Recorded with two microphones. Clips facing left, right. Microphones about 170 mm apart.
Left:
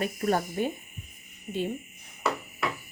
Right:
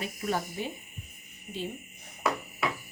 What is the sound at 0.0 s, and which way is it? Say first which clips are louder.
Speech: left 5 dB; 50° left (ahead or behind).